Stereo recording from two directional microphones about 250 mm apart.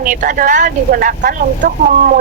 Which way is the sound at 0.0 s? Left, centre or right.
Right.